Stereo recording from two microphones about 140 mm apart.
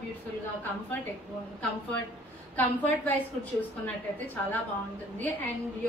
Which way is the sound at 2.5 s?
10° left (ahead or behind).